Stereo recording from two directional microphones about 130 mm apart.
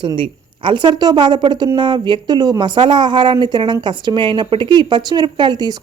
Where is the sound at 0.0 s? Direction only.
40° right (ahead or behind).